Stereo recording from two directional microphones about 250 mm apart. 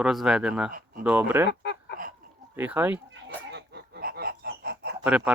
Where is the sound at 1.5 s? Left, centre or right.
Left.